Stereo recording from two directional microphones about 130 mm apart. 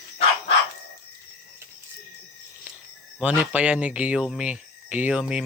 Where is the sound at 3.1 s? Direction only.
10° right (ahead or behind).